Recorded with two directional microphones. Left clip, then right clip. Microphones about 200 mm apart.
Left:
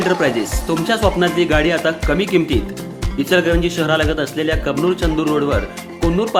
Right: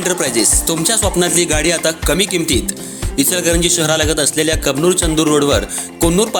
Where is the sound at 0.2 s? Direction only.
30° right (ahead or behind).